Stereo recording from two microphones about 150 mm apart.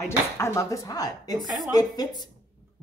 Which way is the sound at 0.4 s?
20° left (ahead or behind).